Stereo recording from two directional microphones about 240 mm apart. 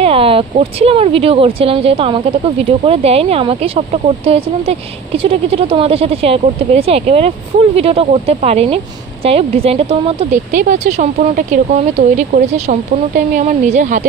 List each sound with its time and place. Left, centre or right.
0.0 s speech: right